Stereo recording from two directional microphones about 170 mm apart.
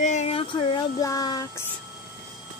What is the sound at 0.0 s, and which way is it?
Child singing, 45° left (ahead or behind).